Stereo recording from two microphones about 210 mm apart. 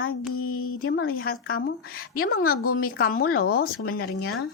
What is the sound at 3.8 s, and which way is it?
Speech, 85° left.